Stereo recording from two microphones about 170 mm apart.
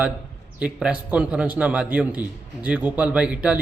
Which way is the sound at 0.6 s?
5° right (ahead or behind).